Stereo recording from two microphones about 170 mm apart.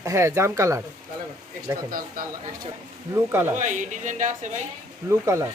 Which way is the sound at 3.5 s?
45° right (ahead or behind).